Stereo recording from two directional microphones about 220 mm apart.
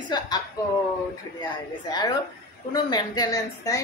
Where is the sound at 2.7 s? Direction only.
20° left (ahead or behind).